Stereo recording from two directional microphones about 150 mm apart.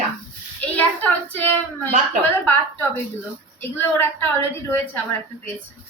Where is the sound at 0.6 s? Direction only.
10° left (ahead or behind).